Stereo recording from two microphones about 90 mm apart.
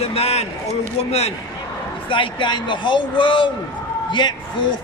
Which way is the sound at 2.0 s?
65° left (ahead or behind).